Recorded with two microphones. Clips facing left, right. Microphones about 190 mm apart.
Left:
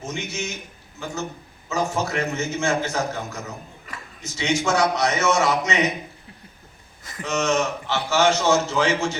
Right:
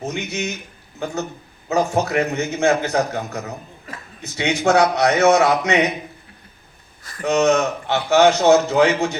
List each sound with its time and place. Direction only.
0.0 s a man's voice: 60° right (ahead or behind)
1.6 s a man's voice: 60° right (ahead or behind)
7.2 s a man's voice: 60° right (ahead or behind)